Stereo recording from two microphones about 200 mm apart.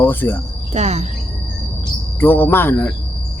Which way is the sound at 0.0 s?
10° left (ahead or behind).